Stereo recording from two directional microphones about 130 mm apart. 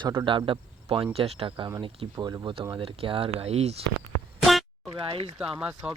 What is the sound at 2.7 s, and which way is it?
Speech, 45° right (ahead or behind).